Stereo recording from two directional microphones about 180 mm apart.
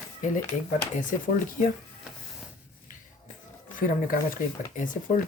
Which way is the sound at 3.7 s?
50° left (ahead or behind).